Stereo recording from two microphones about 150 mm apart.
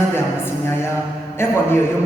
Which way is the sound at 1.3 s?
15° left (ahead or behind).